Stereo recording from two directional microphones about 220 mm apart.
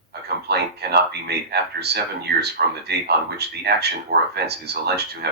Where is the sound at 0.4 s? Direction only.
50° right (ahead or behind).